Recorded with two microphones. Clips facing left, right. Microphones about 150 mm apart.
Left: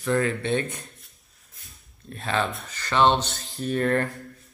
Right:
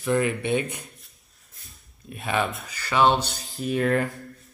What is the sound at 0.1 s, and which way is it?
Speech, 20° right (ahead or behind).